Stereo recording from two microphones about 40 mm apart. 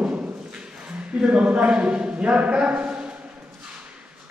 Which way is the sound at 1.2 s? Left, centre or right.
Right.